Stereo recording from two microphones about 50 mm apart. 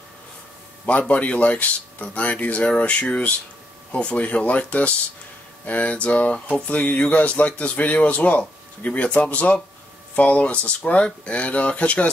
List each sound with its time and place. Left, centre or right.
0.8 s a man's voice: left